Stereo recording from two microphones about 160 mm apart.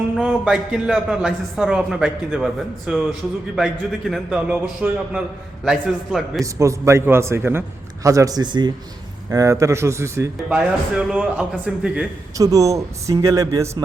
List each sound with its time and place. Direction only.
0.2 s a man's voice: 5° right (ahead or behind)
4.1 s a man's voice: 5° right (ahead or behind)
6.4 s a man's voice: 20° right (ahead or behind)
10.6 s a man's voice: 5° right (ahead or behind)
12.4 s a man's voice: 20° right (ahead or behind)